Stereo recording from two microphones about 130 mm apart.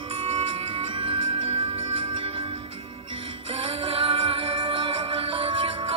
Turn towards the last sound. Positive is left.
turn(degrees=-40)  # may be behind; listen again after turning